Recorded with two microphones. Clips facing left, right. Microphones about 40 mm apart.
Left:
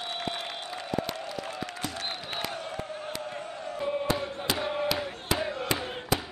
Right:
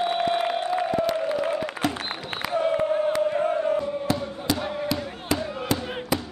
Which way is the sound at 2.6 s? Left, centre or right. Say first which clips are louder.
Right 14 dB; right.